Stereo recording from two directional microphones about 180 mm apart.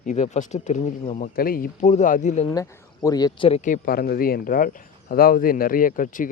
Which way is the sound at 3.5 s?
45° left (ahead or behind).